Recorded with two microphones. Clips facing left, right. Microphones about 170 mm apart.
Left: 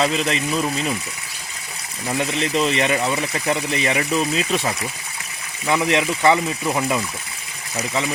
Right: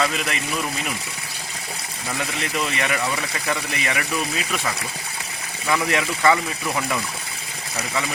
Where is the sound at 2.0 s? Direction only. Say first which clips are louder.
Left 6 dB; 25° left (ahead or behind).